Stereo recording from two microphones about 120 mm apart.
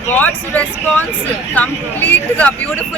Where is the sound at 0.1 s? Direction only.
15° left (ahead or behind).